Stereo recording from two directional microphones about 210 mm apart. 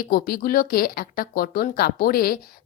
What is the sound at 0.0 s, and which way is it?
Speech, 45° left (ahead or behind).